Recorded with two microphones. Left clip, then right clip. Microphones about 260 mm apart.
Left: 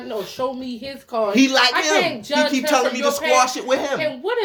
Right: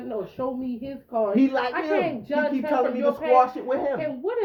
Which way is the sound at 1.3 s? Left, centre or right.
Left.